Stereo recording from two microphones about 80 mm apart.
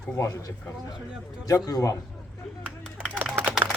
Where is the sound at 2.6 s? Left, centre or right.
Centre.